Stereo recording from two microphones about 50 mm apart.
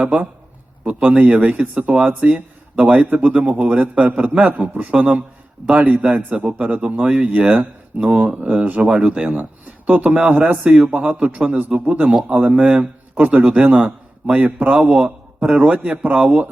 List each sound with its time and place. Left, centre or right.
0.9 s a man's voice: right